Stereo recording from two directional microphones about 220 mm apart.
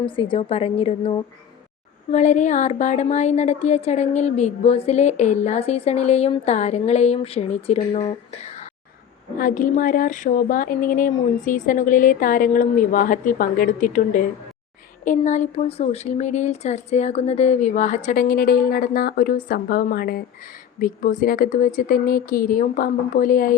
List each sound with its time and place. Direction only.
0.0 s a woman's voice: 25° left (ahead or behind); by 23.6 s 40° left (ahead or behind)